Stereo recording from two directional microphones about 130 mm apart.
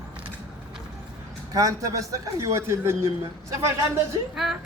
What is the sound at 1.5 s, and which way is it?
A man's voice, 25° right (ahead or behind).